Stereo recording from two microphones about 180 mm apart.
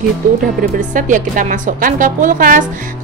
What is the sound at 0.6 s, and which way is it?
Speech, 45° right (ahead or behind).